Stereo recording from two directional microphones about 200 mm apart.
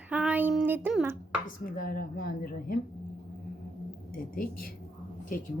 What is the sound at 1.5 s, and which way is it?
Speech, 45° left (ahead or behind).